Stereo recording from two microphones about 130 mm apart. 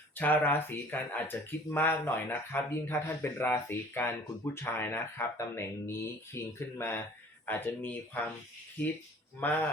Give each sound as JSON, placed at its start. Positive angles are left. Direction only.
{"t": 0.2, "sound": "speech", "side_deg": 15}
{"t": 9.4, "sound": "speech", "side_deg": 10}